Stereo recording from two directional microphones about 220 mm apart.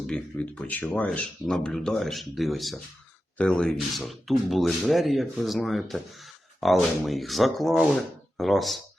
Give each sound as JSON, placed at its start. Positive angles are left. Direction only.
{"t": 0.1, "sound": "speech", "side_deg": 5}